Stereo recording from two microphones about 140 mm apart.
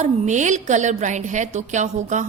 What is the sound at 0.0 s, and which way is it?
A woman's voice, 60° right (ahead or behind).